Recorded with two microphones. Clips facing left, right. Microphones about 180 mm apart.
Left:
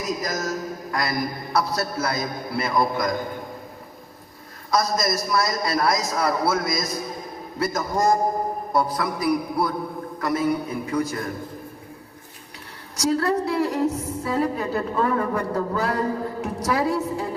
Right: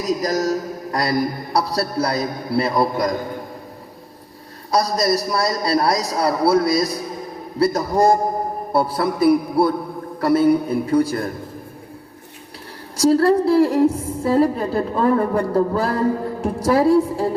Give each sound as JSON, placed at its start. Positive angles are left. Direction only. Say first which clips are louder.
{"t": 0.0, "sound": "a man's voice", "louder": "right 7 dB", "side_deg": -35}
{"t": 4.7, "sound": "a man's voice", "louder": "right 4 dB", "side_deg": -35}
{"t": 13.0, "sound": "a man's voice", "louder": "right 7 dB", "side_deg": -30}